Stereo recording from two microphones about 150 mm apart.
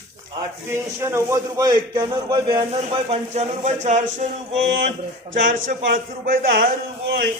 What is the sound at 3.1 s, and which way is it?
Speech, 45° right (ahead or behind).